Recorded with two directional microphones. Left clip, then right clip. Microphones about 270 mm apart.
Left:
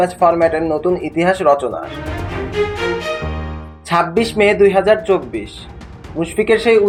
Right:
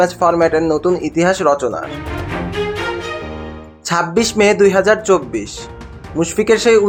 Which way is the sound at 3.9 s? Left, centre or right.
Right.